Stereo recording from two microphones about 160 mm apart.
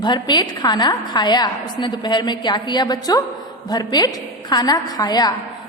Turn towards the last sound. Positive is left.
turn(degrees=25)  # may be behind; listen again after turning